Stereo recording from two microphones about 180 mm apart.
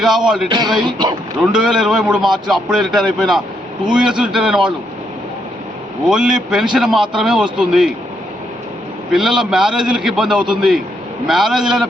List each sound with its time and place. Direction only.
0.0 s a man's voice: 5° right (ahead or behind)
0.4 s speech: 25° right (ahead or behind)
1.5 s a man's voice: 5° right (ahead or behind)
6.1 s a man's voice: 5° right (ahead or behind)
9.1 s a man's voice: 5° right (ahead or behind)